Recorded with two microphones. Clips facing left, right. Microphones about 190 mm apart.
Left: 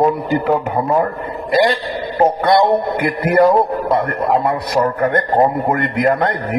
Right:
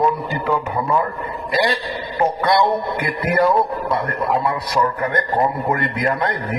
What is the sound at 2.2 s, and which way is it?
A man's voice, 50° left (ahead or behind).